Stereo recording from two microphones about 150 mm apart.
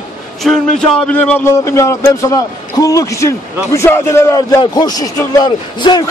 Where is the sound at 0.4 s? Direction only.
5° left (ahead or behind).